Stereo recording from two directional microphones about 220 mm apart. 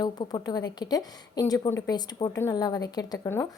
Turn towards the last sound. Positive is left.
turn(degrees=15)  # may be behind; listen again after turning